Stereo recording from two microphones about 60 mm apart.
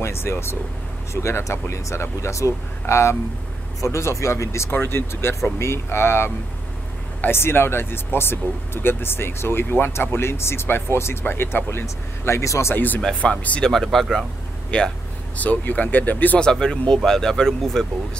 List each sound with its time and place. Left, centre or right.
0.0 s speech: left
4.6 s speech: left
11.8 s speech: left
12.7 s speech: left
13.9 s speech: centre
14.7 s speech: centre
16.3 s speech: centre